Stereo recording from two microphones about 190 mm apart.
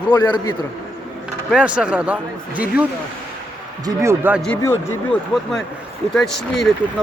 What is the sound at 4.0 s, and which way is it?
Speech, 10° right (ahead or behind).